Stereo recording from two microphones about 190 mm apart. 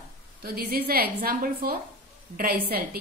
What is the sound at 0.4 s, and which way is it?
A woman's voice, 55° right (ahead or behind).